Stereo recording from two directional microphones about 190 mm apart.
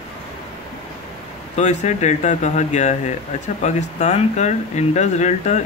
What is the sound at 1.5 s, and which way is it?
Speech, 35° left (ahead or behind).